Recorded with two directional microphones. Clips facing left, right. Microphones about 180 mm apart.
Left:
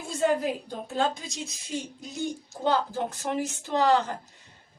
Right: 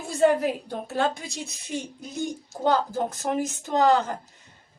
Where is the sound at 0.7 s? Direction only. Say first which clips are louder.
Right 2 dB; 60° right (ahead or behind).